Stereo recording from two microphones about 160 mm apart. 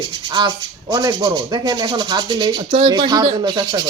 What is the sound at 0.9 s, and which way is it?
Speech, 25° right (ahead or behind).